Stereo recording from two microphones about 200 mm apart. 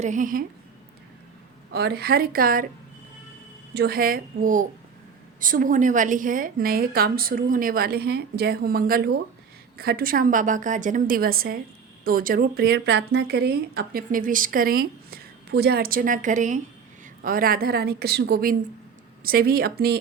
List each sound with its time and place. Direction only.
0.0 s a woman's voice: 40° right (ahead or behind)
1.7 s speech: 50° right (ahead or behind)
3.8 s speech: 50° right (ahead or behind)